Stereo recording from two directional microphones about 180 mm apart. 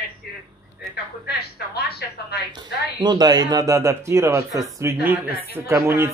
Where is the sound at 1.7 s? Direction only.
65° left (ahead or behind).